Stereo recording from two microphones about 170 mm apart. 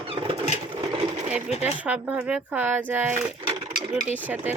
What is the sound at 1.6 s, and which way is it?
Speech, 10° right (ahead or behind).